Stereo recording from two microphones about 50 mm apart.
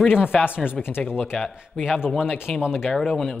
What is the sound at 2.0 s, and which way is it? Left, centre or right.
Speech, centre.